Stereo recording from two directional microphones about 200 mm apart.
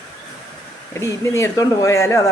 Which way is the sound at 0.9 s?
15° left (ahead or behind).